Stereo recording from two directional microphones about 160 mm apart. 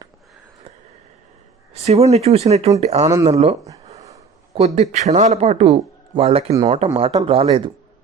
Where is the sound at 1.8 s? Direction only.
40° right (ahead or behind).